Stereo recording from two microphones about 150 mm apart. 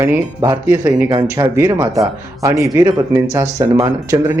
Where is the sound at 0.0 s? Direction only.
15° right (ahead or behind).